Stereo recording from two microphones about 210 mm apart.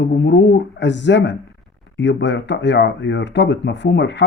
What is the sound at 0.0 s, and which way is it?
Speech, 50° left (ahead or behind).